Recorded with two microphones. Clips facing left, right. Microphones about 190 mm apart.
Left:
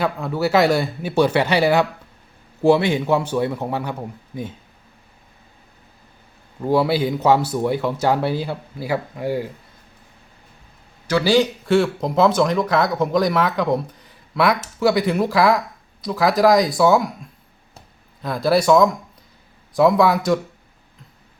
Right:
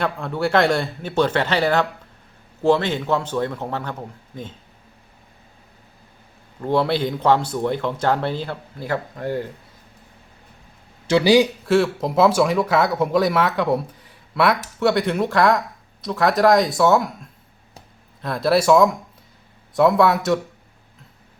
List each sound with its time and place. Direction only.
0.0 s speech: 5° left (ahead or behind)
6.6 s speech: 5° left (ahead or behind)
11.0 s speech: 20° right (ahead or behind)
11.6 s speech: centre (ahead or behind)